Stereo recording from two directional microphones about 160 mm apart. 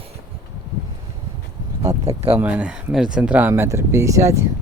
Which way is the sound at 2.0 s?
40° right (ahead or behind).